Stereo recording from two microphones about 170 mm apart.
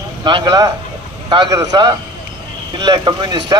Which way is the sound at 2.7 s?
25° right (ahead or behind).